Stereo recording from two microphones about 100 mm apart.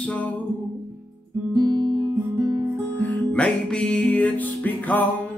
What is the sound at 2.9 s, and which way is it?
Music, 15° left (ahead or behind).